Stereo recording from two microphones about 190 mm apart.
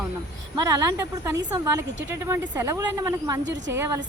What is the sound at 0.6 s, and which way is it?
A woman's voice, 15° right (ahead or behind).